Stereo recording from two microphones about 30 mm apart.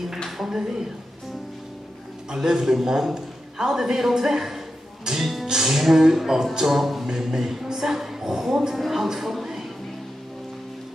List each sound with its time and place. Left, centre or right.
0.4 s a sound: centre
2.3 s a man's voice: centre
5.2 s music: centre
5.5 s a man's voice: centre
8.7 s a woman's voice: centre